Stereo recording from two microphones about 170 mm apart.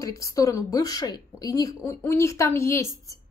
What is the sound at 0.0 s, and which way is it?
A woman's voice, 20° left (ahead or behind).